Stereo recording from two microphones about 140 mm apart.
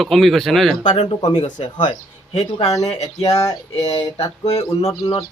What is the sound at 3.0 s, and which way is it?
Chicken, 50° left (ahead or behind).